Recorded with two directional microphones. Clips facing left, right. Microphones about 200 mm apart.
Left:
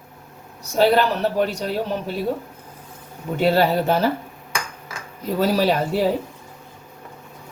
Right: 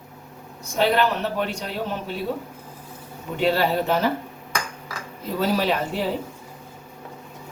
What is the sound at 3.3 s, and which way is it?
Speech, 40° left (ahead or behind).